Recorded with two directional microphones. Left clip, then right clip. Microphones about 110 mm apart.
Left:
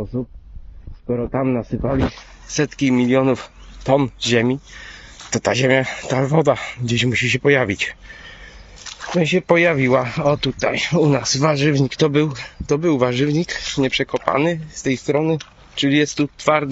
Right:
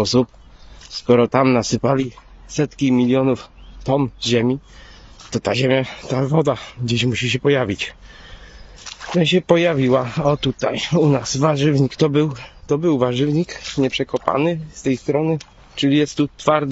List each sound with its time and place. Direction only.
1.0 s speech: 85° right
1.3 s speech: 65° right (ahead or behind)
2.5 s speech: 20° right (ahead or behind)
9.2 s speech: 60° right (ahead or behind)
10.0 s speech: 70° right (ahead or behind)
10.6 s speech: 40° right (ahead or behind)
12.1 s speech: 30° right (ahead or behind)
15.9 s speech: 70° right (ahead or behind)